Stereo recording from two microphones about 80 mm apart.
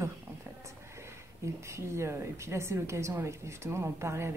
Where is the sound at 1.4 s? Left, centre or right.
Right.